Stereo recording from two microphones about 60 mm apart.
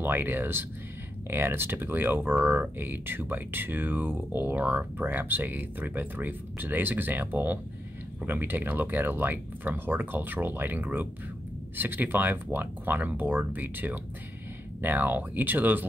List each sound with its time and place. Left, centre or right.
0.0 s speech: right